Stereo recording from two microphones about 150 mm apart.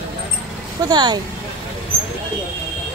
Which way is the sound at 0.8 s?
30° right (ahead or behind).